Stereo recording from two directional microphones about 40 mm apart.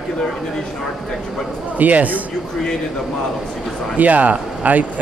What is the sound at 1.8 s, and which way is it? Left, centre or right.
Speech, right.